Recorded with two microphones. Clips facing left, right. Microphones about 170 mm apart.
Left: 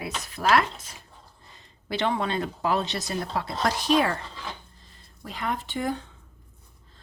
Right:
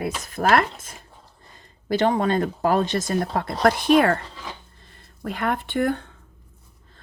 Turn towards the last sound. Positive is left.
turn(degrees=-60)  # may be behind; listen again after turning